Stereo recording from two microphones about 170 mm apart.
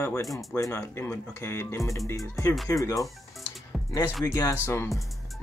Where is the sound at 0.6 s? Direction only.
15° left (ahead or behind).